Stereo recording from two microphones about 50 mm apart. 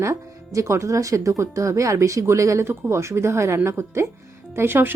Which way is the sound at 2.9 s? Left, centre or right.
Right.